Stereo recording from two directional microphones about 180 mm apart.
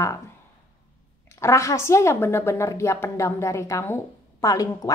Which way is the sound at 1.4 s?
15° left (ahead or behind).